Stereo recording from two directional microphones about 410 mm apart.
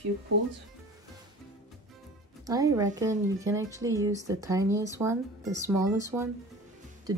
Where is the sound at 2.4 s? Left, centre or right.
Centre.